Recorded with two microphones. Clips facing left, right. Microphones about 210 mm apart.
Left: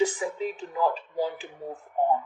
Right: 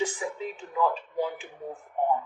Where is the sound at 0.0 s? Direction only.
35° left (ahead or behind).